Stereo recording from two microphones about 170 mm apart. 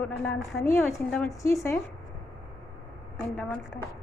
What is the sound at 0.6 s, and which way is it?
Speech, 15° left (ahead or behind).